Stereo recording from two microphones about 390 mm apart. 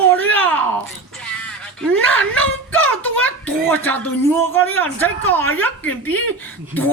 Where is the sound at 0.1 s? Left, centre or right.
Centre.